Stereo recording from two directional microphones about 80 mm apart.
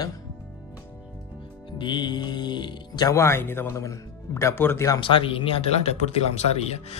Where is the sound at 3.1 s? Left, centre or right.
Left.